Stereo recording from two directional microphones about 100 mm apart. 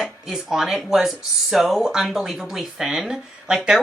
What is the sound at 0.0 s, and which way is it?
Speech, 5° right (ahead or behind).